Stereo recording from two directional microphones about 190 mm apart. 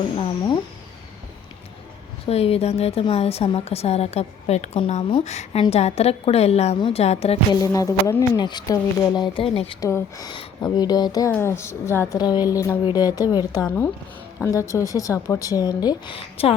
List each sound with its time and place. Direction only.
0.2 s a woman's voice: 25° left (ahead or behind)
2.2 s speech: 30° left (ahead or behind)
7.6 s a woman's voice: 20° left (ahead or behind)
9.8 s a woman's voice: 20° left (ahead or behind)